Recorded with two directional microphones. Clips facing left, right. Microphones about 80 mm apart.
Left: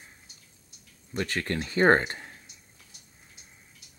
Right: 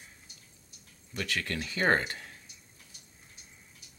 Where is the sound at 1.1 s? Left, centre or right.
Left.